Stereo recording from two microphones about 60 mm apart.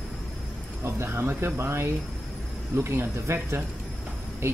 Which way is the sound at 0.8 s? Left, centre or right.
Right.